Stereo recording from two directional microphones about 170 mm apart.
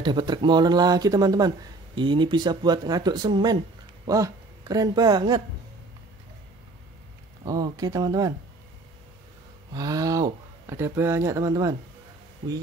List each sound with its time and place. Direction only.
0.0 s speech: 25° right (ahead or behind)
7.4 s speech: 20° right (ahead or behind)
9.7 s speech: 20° right (ahead or behind)